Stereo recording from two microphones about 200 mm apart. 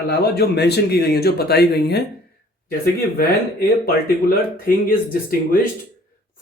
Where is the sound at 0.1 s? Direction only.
55° left (ahead or behind).